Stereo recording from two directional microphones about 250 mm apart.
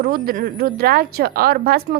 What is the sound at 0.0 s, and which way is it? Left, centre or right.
A woman's voice, right.